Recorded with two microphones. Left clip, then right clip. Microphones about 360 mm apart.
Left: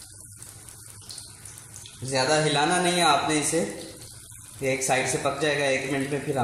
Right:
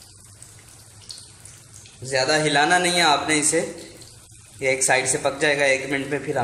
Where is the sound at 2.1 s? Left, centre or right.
Right.